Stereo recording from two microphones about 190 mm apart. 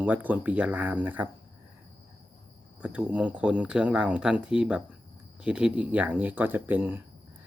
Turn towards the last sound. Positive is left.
turn(degrees=-10)  # may be behind; listen again after turning